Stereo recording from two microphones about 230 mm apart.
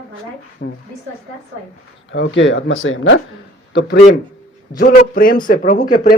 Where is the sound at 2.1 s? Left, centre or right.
Left.